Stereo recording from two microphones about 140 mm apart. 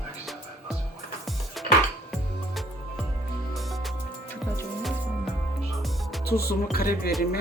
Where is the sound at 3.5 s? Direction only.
Centre (ahead or behind).